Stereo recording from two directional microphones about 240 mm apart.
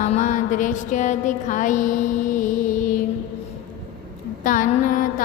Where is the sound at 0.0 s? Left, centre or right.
Left.